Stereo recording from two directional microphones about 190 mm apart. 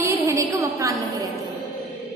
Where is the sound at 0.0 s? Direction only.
15° right (ahead or behind).